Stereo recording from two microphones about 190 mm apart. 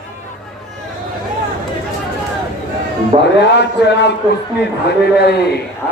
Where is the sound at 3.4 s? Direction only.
60° left (ahead or behind).